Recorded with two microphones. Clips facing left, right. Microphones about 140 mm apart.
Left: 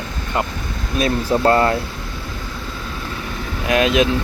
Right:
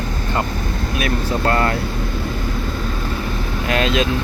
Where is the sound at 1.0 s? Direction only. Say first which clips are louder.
Left 5 dB; 25° left (ahead or behind).